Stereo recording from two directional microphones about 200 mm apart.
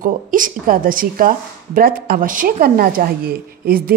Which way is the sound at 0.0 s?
45° right (ahead or behind).